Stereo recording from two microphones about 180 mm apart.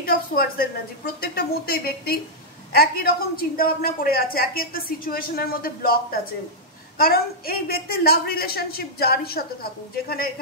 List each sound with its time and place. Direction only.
0.0 s a woman's voice: 55° left (ahead or behind)